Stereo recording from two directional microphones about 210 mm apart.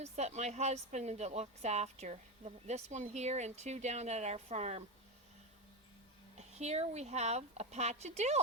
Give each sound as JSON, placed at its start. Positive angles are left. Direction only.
{"t": 0.0, "sound": "speech", "side_deg": -30}
{"t": 6.3, "sound": "speech", "side_deg": -30}